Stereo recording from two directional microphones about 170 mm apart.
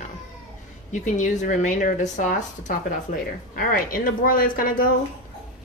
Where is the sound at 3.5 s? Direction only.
55° left (ahead or behind).